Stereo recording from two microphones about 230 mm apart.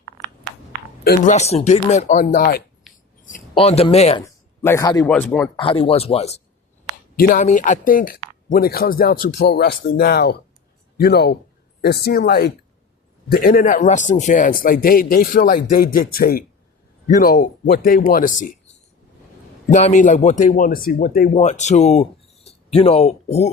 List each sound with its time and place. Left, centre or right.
1.0 s speech: left
2.9 s a sound: centre
3.5 s speech: left
4.6 s a man's voice: centre
5.5 s a man's voice: left
19.6 s speech: left